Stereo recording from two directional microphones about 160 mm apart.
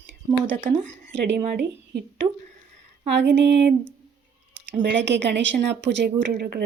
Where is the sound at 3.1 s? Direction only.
90° right.